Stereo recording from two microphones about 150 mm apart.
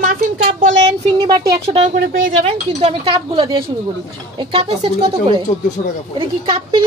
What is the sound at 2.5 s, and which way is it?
A woman's voice, 45° right (ahead or behind).